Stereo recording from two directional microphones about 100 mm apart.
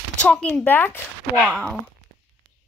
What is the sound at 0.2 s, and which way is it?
Speech, 10° left (ahead or behind).